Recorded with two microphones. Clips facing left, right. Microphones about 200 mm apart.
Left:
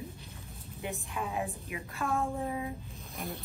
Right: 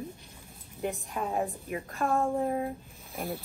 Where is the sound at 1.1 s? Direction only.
40° right (ahead or behind).